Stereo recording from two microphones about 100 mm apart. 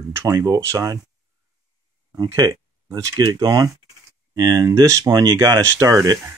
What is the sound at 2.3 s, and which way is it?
Speech, 40° right (ahead or behind).